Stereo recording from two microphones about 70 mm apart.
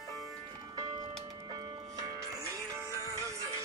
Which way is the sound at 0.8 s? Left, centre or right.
Right.